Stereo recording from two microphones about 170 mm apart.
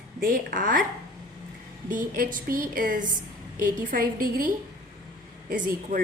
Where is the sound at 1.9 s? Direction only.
50° right (ahead or behind).